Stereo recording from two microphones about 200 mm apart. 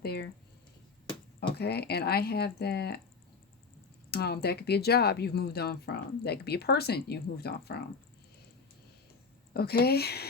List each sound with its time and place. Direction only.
0.0 s speech: 50° left (ahead or behind)
1.4 s speech: 55° left (ahead or behind)
4.1 s speech: 55° left (ahead or behind)
9.5 s speech: 50° left (ahead or behind)